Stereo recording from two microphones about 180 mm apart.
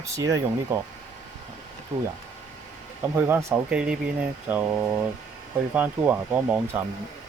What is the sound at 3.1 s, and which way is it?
Speech, 15° right (ahead or behind).